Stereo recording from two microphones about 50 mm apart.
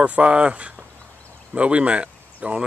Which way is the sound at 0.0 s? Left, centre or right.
Right.